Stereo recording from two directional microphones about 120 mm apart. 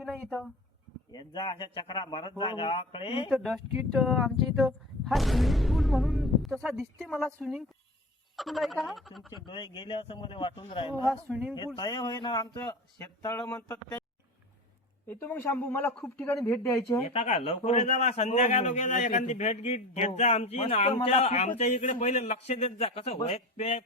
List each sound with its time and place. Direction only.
0.0 s speech: 5° left (ahead or behind)
1.1 s speech: 35° left (ahead or behind)
3.2 s speech: centre (ahead or behind)
7.1 s a man's voice: 10° left (ahead or behind)
9.5 s speech: 45° left (ahead or behind)
11.3 s speech: 10° right (ahead or behind)
11.8 s a man's voice: 35° left (ahead or behind); by 14.0 s 15° left (ahead or behind)
15.0 s a man's voice: 15° left (ahead or behind)
17.0 s speech: 55° left (ahead or behind); by 21.9 s 75° left (ahead or behind)
21.9 s speech: 65° left (ahead or behind)